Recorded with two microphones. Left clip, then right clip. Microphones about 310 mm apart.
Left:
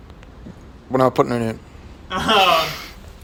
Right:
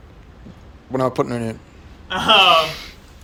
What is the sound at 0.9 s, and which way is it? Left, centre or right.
A man's voice, centre.